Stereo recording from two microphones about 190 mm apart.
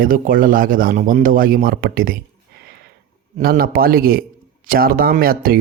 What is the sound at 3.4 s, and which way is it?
Speech, 50° right (ahead or behind).